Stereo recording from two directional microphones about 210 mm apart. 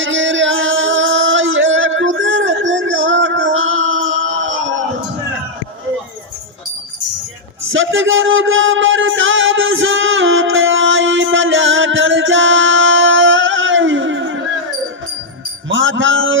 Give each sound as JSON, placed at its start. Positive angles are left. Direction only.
{"t": 0.0, "sound": "music", "side_deg": -60}
{"t": 7.7, "sound": "a sound", "side_deg": -65}
{"t": 15.7, "sound": "mantra", "side_deg": -65}